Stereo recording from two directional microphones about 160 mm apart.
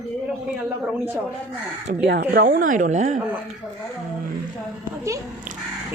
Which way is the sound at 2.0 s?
80° right.